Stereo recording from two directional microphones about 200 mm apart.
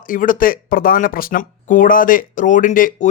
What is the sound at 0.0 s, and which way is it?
Speech, 40° left (ahead or behind).